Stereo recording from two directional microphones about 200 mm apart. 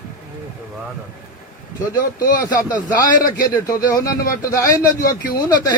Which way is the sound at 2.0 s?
45° left (ahead or behind).